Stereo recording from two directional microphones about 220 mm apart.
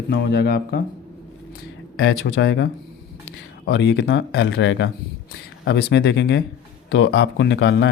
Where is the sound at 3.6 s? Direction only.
45° left (ahead or behind).